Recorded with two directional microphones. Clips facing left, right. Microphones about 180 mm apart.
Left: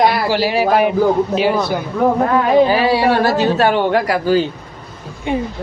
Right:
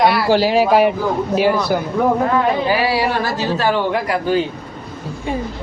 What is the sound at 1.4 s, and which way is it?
Speech, 20° left (ahead or behind).